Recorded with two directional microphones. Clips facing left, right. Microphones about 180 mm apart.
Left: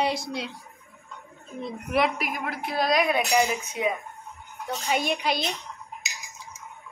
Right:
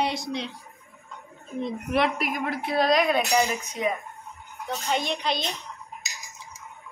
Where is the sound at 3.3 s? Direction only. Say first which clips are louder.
Even; 15° left (ahead or behind).